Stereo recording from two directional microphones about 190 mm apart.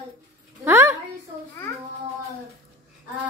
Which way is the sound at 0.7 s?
15° right (ahead or behind).